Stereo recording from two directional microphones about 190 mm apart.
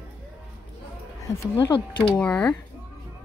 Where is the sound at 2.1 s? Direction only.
5° left (ahead or behind).